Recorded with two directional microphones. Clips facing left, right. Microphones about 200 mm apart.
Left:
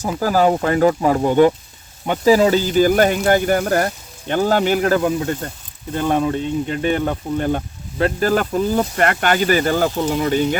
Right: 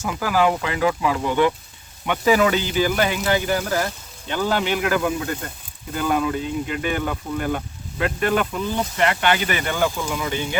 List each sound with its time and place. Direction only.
0.0 s speech: 35° left (ahead or behind)